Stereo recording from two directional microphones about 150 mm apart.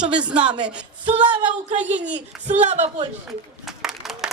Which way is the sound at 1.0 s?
35° right (ahead or behind).